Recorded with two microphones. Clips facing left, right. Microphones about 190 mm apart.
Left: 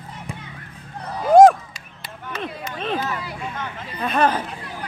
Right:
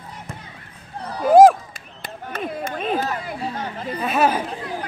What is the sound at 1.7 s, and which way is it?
Chop, 50° right (ahead or behind).